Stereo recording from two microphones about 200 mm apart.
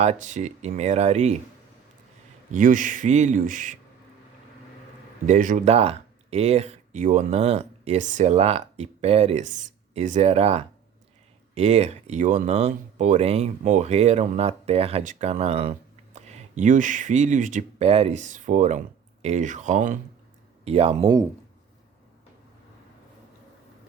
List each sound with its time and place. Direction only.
0.0 s speech: 35° right (ahead or behind)
2.5 s speech: 40° right (ahead or behind)
5.2 s speech: 40° right (ahead or behind)